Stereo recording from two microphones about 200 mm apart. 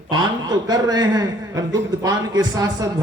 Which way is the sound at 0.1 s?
20° right (ahead or behind).